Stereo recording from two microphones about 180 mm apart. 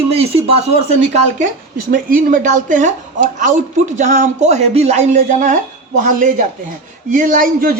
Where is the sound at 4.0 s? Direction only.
40° right (ahead or behind).